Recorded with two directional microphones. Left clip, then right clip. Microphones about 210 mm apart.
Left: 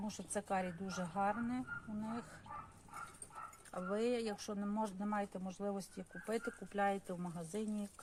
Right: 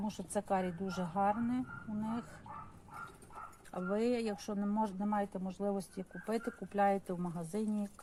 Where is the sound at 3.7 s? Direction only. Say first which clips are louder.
Right 3 dB; 15° right (ahead or behind).